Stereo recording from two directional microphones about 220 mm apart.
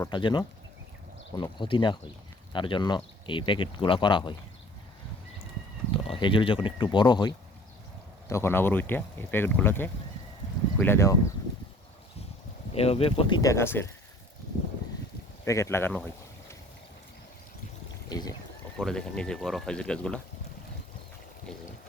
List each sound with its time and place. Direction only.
0.0 s speech: 20° left (ahead or behind)
5.9 s speech: 20° left (ahead or behind)
12.7 s speech: 25° left (ahead or behind); by 13.9 s 10° left (ahead or behind)
15.4 s speech: 15° left (ahead or behind)
18.1 s horse: 15° left (ahead or behind)
18.8 s speech: 5° left (ahead or behind)